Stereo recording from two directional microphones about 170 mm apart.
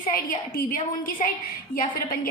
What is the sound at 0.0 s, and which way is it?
A woman's voice, 55° left (ahead or behind).